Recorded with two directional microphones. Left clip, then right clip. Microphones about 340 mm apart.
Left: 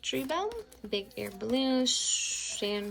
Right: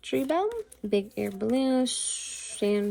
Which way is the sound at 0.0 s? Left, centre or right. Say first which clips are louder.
Right 5 dB; centre.